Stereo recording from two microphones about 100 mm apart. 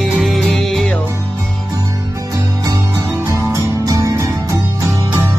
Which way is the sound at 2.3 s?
35° right (ahead or behind).